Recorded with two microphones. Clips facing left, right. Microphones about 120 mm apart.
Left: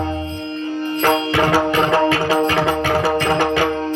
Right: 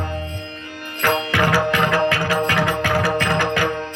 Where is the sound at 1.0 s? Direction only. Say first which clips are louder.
Left 2 dB; 25° left (ahead or behind).